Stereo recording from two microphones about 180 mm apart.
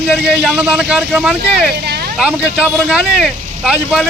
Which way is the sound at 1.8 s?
65° right (ahead or behind).